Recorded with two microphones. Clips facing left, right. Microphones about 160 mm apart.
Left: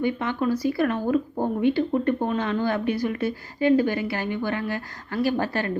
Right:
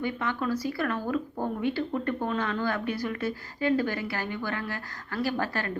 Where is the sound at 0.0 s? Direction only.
20° left (ahead or behind).